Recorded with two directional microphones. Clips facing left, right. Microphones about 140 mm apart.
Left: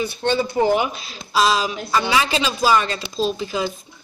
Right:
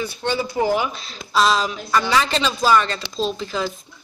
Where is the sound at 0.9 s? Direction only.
5° left (ahead or behind).